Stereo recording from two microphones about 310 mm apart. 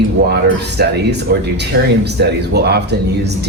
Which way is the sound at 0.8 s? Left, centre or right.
Right.